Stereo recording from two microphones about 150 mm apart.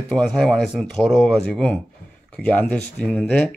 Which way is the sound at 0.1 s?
5° left (ahead or behind).